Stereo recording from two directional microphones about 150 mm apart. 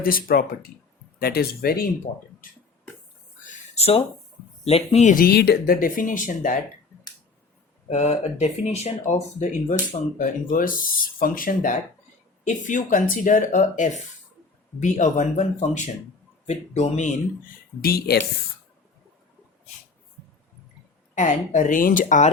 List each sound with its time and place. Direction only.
0.0 s speech: 75° left (ahead or behind)
1.2 s speech: 90° left
3.4 s a sound: 60° left (ahead or behind)
4.6 s speech: 40° left (ahead or behind)
5.2 s speech: 90° left; by 6.6 s 60° left (ahead or behind)
7.9 s speech: 50° left (ahead or behind)
17.7 s speech: 90° left
21.2 s speech: 55° left (ahead or behind)